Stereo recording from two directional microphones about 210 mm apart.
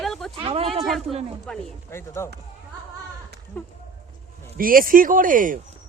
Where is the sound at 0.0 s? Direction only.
Centre (ahead or behind).